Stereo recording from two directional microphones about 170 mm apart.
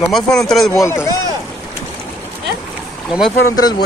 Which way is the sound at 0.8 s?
15° left (ahead or behind).